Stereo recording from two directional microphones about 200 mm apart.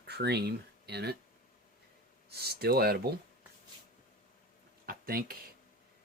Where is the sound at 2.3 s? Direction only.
55° right (ahead or behind).